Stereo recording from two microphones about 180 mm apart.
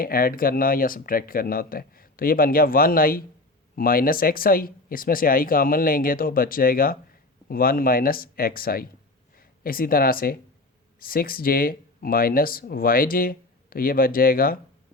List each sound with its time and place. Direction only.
0.0 s speech: 55° left (ahead or behind)